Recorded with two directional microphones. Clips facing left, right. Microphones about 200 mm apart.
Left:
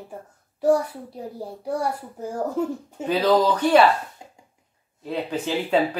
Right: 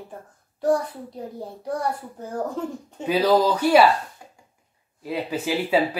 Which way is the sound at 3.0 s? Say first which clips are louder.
Even; 10° right (ahead or behind).